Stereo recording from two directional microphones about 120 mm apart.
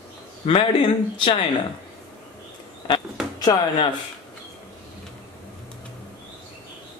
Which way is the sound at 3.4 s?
35° left (ahead or behind).